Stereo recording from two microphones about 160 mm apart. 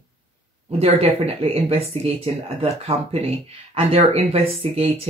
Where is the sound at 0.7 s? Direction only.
40° right (ahead or behind).